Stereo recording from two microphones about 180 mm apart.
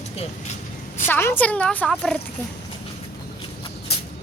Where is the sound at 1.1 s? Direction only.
10° left (ahead or behind).